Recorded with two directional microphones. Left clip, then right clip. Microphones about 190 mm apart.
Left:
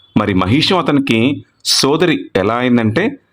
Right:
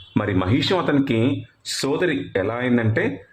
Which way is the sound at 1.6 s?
40° left (ahead or behind).